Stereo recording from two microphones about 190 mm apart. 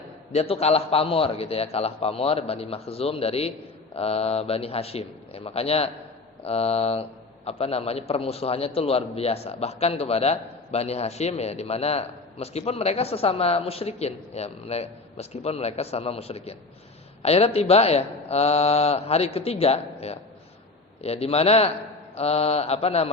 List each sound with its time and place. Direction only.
0.3 s a man's voice: 30° left (ahead or behind)